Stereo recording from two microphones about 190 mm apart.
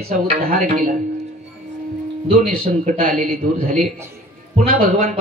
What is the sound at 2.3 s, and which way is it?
Speech, 50° right (ahead or behind).